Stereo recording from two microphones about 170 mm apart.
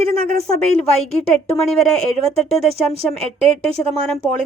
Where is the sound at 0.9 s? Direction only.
40° left (ahead or behind).